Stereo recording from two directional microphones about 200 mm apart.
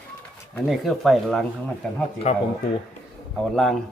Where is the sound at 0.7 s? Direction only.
Centre (ahead or behind).